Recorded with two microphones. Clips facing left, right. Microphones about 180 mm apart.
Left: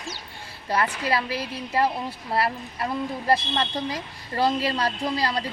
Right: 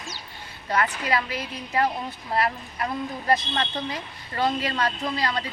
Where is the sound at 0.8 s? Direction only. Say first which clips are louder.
Even; 30° left (ahead or behind).